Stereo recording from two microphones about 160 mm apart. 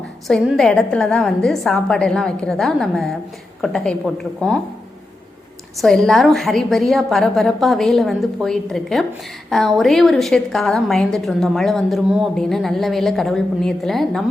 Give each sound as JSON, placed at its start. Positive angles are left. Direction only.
{"t": 0.3, "sound": "a woman's voice", "side_deg": 5}
{"t": 5.7, "sound": "a woman's voice", "side_deg": 5}